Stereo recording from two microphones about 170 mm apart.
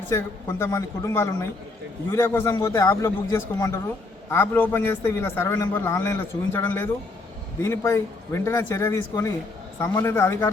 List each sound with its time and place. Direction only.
0.1 s a man's voice: 15° left (ahead or behind)